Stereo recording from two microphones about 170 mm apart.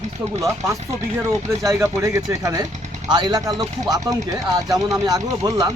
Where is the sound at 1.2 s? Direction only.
15° right (ahead or behind).